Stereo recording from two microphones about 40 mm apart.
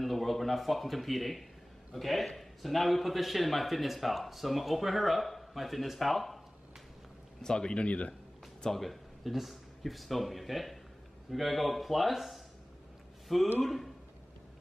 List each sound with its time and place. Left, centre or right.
0.0 s a man's voice: centre
7.4 s speech: left
8.6 s a man's voice: centre
13.6 s a man's voice: centre